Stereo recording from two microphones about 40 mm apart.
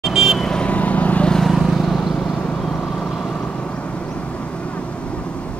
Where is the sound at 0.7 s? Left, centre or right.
Left.